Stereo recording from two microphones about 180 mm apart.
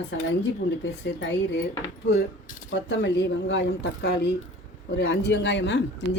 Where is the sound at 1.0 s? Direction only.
70° left (ahead or behind).